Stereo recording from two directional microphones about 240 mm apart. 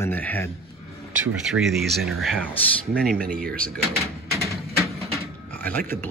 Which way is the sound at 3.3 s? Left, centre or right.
Right.